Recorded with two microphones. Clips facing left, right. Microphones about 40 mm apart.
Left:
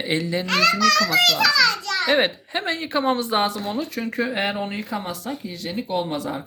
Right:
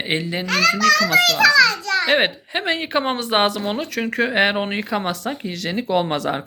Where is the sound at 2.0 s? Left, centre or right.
Right.